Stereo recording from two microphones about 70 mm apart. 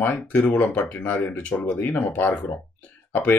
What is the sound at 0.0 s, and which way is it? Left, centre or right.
Speech, left.